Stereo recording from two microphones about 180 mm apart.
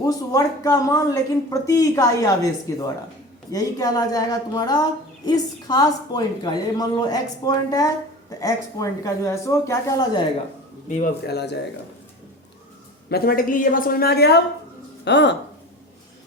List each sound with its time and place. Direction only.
0.0 s a woman's voice: 20° left (ahead or behind)
10.8 s a man's voice: 45° left (ahead or behind)
11.3 s a woman's voice: 65° left (ahead or behind)
13.1 s a woman's voice: 60° left (ahead or behind)